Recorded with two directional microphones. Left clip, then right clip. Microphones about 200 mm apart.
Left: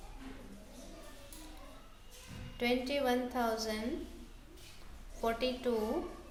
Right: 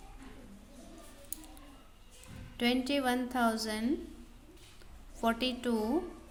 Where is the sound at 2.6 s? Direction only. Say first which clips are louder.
Right 2 dB; 45° right (ahead or behind).